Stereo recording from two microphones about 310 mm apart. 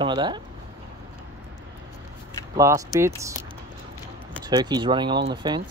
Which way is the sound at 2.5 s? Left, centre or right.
Centre.